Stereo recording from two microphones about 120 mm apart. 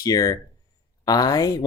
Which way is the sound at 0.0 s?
30° left (ahead or behind).